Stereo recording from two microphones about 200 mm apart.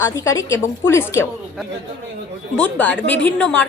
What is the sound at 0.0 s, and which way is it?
A woman's voice, 15° left (ahead or behind).